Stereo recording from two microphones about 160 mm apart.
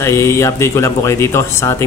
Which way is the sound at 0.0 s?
20° left (ahead or behind).